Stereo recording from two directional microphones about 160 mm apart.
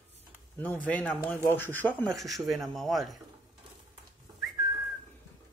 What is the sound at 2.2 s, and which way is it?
Speech, centre (ahead or behind).